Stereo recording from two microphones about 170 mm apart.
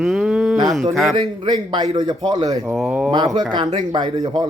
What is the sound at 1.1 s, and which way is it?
Speech, 25° right (ahead or behind).